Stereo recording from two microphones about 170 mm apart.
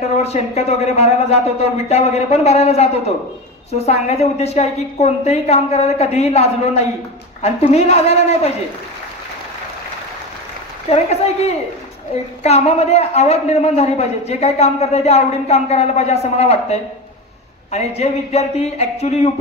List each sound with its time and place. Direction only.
0.2 s a man's voice: 40° left (ahead or behind)
10.9 s a man's voice: 40° left (ahead or behind)